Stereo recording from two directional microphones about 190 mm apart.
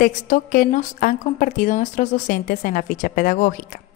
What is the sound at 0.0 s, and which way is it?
A woman's voice, 45° left (ahead or behind).